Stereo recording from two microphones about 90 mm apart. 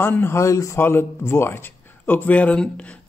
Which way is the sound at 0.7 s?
25° left (ahead or behind).